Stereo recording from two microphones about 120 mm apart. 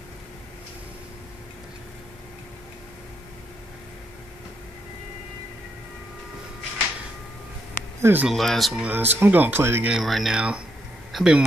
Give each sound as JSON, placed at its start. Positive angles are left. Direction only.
{"t": 8.0, "sound": "speech", "side_deg": -15}
{"t": 8.3, "sound": "speech", "side_deg": 0}
{"t": 8.8, "sound": "speech", "side_deg": -15}
{"t": 9.8, "sound": "speech", "side_deg": 0}